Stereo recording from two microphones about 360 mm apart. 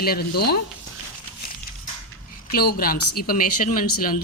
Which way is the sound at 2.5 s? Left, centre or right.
Left.